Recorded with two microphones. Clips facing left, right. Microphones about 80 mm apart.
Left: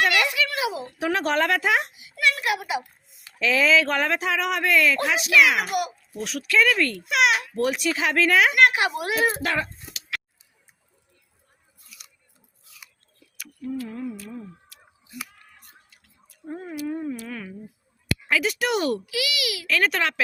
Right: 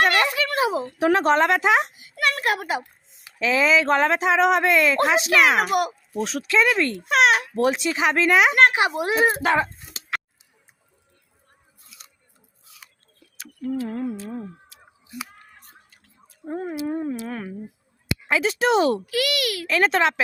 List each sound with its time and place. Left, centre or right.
0.0 s a sound: right
0.9 s a child's voice: right
1.2 s speech: right
1.9 s a child's voice: right
3.3 s speech: right
6.2 s speech: right
7.0 s speech: right
11.9 s scissors: right
13.8 s a child's voice: right
15.3 s scissors: right
16.3 s a sound: right
18.3 s speech: right
19.0 s a child's voice: right
19.6 s speech: right